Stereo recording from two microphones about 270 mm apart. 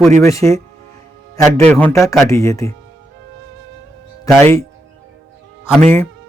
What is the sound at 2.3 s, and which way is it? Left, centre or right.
Speech, centre.